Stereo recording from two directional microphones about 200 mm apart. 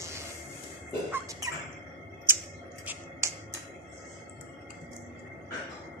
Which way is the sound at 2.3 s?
10° right (ahead or behind).